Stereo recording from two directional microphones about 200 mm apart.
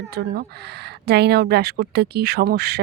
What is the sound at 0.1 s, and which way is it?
Speech, 50° right (ahead or behind).